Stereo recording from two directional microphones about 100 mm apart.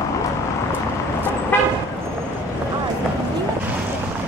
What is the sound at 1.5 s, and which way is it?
Vehicle, 20° left (ahead or behind).